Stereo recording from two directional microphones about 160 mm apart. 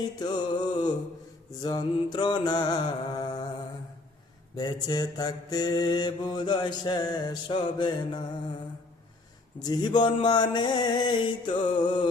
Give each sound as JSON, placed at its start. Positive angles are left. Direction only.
{"t": 0.2, "sound": "mantra", "side_deg": 25}
{"t": 4.5, "sound": "mantra", "side_deg": 25}
{"t": 9.6, "sound": "mantra", "side_deg": 25}